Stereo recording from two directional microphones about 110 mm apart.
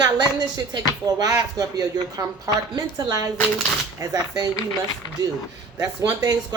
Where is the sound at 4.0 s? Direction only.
35° right (ahead or behind).